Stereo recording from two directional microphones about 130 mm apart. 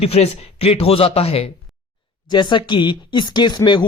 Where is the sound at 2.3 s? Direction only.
35° left (ahead or behind).